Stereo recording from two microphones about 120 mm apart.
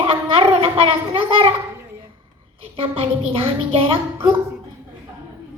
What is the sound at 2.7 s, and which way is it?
Speech, 50° right (ahead or behind).